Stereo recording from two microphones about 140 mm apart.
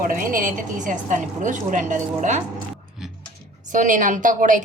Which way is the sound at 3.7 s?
65° right (ahead or behind).